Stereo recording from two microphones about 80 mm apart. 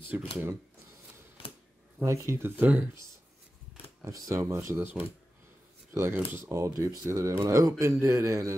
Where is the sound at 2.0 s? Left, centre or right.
Right.